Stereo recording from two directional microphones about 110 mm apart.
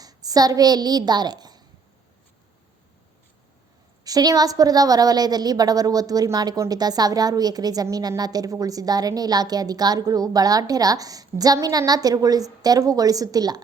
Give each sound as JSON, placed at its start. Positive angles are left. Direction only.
{"t": 0.0, "sound": "a child's voice", "side_deg": -35}
{"t": 4.0, "sound": "a woman's voice", "side_deg": -35}